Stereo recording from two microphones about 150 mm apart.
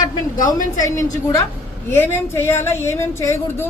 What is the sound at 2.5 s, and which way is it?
A woman's voice, 15° left (ahead or behind).